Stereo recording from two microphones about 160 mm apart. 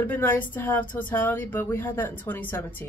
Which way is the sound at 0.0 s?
10° left (ahead or behind).